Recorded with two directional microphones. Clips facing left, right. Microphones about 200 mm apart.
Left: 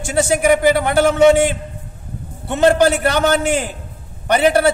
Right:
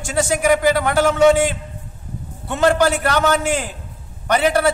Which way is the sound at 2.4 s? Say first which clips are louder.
Left 3 dB; 25° left (ahead or behind).